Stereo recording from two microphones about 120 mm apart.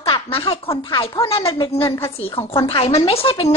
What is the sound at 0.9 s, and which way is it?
Speech, 40° left (ahead or behind).